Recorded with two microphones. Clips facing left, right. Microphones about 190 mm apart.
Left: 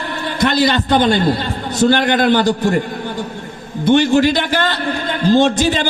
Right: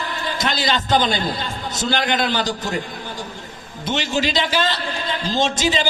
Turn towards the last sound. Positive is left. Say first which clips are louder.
# left 6 dB
turn(degrees=60)  # may be behind; listen again after turning